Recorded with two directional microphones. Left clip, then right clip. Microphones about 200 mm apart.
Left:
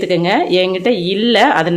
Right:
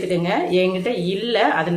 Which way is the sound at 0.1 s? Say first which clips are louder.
Left 6 dB; 45° left (ahead or behind).